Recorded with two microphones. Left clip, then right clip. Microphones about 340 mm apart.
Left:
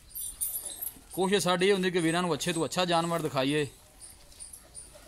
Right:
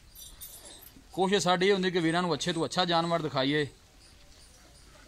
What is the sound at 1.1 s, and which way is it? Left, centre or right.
Speech, centre.